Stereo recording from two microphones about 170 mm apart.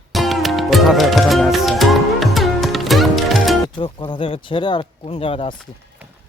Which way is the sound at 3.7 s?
30° left (ahead or behind).